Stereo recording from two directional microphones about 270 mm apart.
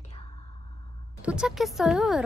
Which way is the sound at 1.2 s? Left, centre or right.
Centre.